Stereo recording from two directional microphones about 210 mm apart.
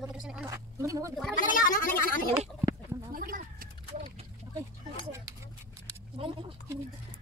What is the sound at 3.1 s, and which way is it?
Bird, 40° right (ahead or behind).